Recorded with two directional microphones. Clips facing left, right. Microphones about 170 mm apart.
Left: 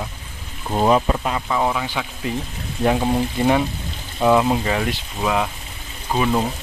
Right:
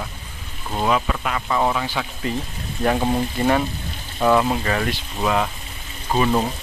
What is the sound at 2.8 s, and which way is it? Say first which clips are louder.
Speech: left 1 dB; 10° left (ahead or behind).